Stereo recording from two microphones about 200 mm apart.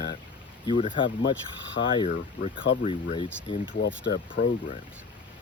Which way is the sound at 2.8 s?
30° left (ahead or behind).